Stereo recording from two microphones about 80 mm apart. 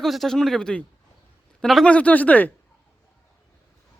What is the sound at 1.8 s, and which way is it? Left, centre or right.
Speech, centre.